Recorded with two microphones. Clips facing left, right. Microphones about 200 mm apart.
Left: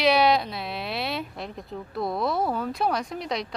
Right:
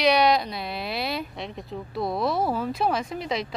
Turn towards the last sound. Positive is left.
turn(degrees=0)  # may be behind; listen again after turning